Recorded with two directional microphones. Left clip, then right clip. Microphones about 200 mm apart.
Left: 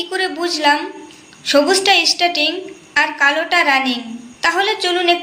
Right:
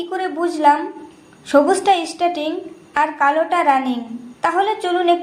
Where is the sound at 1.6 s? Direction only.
35° right (ahead or behind).